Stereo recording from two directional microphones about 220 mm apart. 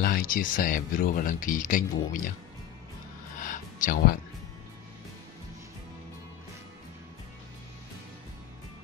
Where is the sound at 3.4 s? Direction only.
35° left (ahead or behind).